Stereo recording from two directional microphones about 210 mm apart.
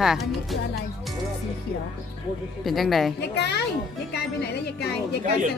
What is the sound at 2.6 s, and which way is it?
Speech, centre (ahead or behind).